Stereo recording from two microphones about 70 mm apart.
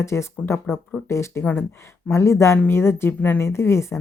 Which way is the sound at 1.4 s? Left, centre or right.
Left.